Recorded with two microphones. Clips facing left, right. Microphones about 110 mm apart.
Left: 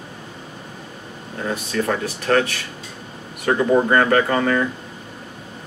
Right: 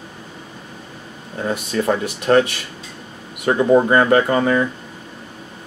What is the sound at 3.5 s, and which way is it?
Speech, 10° right (ahead or behind).